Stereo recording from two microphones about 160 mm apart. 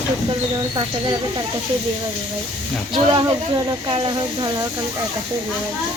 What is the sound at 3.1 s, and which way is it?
Speech, 25° right (ahead or behind).